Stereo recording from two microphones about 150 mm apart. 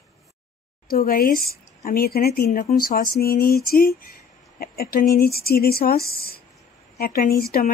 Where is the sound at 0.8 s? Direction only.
75° left (ahead or behind).